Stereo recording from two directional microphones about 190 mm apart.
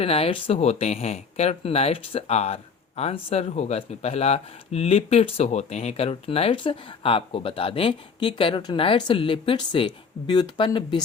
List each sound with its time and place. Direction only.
0.0 s speech: 30° left (ahead or behind)